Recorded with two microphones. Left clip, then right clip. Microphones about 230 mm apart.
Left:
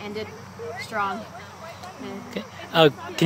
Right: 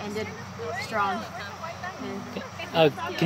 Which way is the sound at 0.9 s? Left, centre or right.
Centre.